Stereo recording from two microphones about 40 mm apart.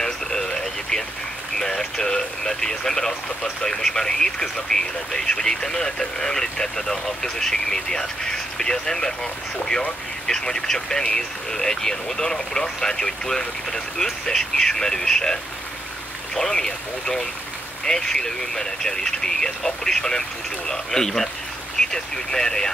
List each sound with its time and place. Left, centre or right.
0.0 s radio: centre
1.6 s speech: centre
16.3 s speech: centre